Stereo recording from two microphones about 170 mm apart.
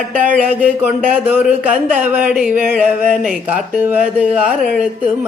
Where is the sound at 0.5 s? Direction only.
10° right (ahead or behind).